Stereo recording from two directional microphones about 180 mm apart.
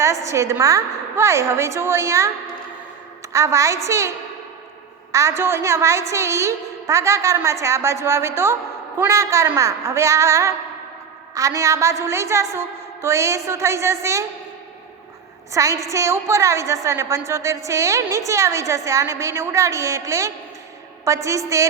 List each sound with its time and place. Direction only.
0.0 s a woman's voice: 15° right (ahead or behind)
3.3 s a woman's voice: 15° right (ahead or behind)
5.1 s a woman's voice: 15° right (ahead or behind)
15.8 s a woman's voice: 15° right (ahead or behind)